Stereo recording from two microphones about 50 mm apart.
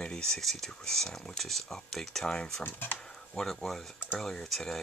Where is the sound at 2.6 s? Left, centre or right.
Left.